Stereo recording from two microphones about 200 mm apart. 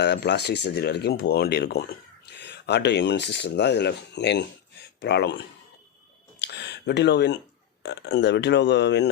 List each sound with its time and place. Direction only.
0.0 s speech: 55° left (ahead or behind)
6.4 s a sound: 60° left (ahead or behind)
7.8 s speech: 60° left (ahead or behind)